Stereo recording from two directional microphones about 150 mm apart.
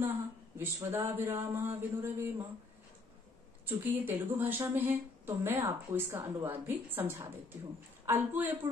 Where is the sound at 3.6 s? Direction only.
15° right (ahead or behind).